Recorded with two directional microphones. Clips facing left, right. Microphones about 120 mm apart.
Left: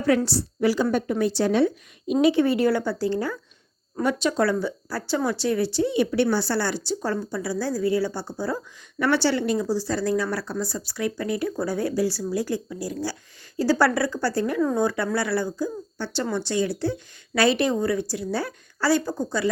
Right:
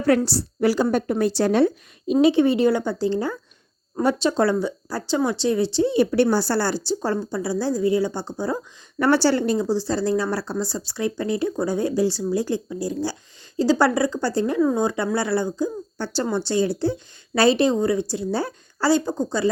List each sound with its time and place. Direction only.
0.3 s a woman's voice: 35° right (ahead or behind)
2.2 s speech: 25° right (ahead or behind)
9.0 s speech: 40° right (ahead or behind); by 15.7 s 25° right (ahead or behind)
16.0 s speech: 45° right (ahead or behind)
16.3 s speech: 30° right (ahead or behind)